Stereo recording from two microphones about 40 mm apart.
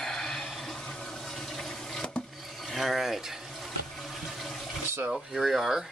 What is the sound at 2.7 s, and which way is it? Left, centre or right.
Speech, centre.